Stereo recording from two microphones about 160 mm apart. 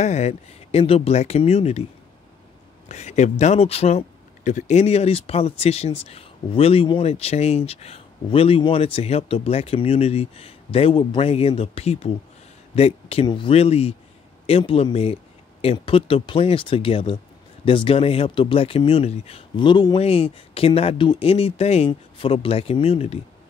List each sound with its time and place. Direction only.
0.0 s speech: 45° left (ahead or behind)
2.9 s speech: 45° left (ahead or behind)